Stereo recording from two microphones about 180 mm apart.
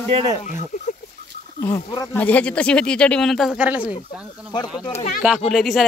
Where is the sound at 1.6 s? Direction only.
20° left (ahead or behind).